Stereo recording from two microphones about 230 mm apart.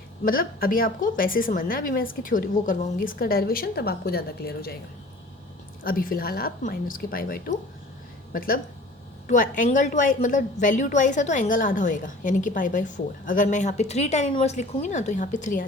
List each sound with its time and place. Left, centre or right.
0.3 s a woman's voice: left
5.8 s a woman's voice: left